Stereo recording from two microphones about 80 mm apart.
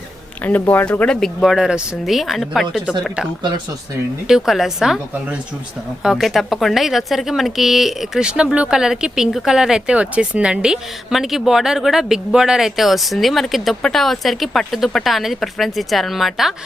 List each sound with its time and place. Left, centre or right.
0.6 s speech: left
0.9 s speech: centre
1.4 s speech: centre
4.3 s speech: centre
6.0 s speech: centre